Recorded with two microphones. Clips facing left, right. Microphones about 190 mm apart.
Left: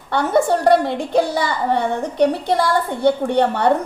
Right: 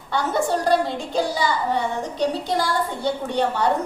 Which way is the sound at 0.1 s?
60° left (ahead or behind).